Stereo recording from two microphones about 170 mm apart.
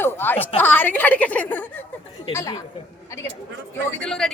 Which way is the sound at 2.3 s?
20° left (ahead or behind).